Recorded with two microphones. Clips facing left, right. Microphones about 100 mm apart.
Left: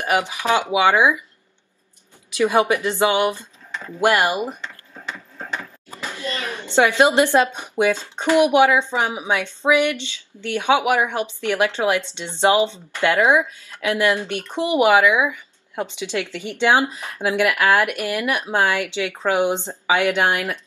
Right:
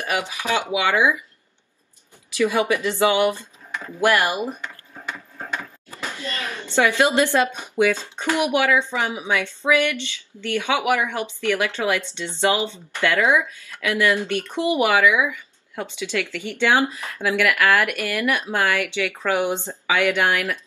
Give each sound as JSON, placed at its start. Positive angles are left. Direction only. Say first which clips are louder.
{"t": 0.0, "sound": "speech", "louder": "left 4 dB", "side_deg": 20}
{"t": 2.3, "sound": "speech", "louder": "left 2 dB", "side_deg": 20}
{"t": 6.0, "sound": "a woman's voice", "louder": "left 2 dB", "side_deg": 15}